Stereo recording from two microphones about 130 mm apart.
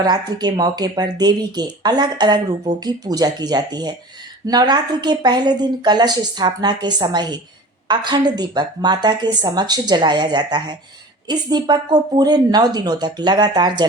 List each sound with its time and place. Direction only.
0.0 s a woman's voice: 30° right (ahead or behind)